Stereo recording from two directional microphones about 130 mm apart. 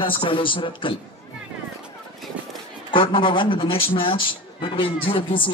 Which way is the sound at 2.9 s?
40° left (ahead or behind).